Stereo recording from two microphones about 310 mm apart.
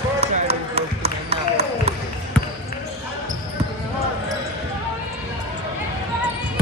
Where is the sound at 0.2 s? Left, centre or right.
Centre.